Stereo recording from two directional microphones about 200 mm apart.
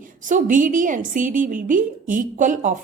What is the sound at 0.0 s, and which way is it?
A woman's voice, 40° right (ahead or behind).